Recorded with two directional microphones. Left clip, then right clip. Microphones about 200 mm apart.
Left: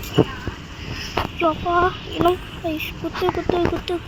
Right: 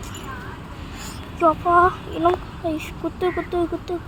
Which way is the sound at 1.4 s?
Centre (ahead or behind).